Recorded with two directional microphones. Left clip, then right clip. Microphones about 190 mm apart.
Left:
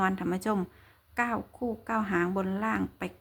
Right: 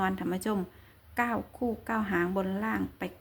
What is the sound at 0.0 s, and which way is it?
A woman's voice, 15° left (ahead or behind).